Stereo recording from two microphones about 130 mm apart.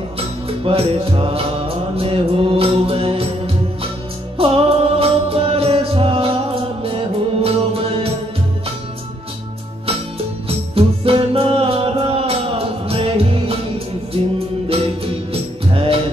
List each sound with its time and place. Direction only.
0.2 s music: 45° right (ahead or behind)
4.4 s music: 45° right (ahead or behind)
10.7 s music: 45° right (ahead or behind)
15.3 s music: 45° right (ahead or behind)